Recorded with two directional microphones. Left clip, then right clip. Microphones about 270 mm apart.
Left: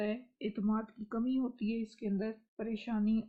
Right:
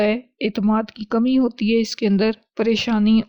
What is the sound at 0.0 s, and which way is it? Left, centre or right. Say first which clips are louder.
Speech: right 17 dB; right.